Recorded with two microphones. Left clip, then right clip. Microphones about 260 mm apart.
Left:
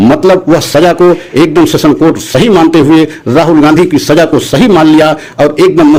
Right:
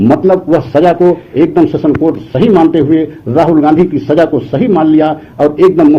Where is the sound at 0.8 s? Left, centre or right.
Left.